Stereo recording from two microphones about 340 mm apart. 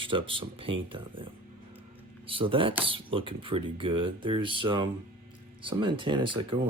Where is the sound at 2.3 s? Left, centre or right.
Centre.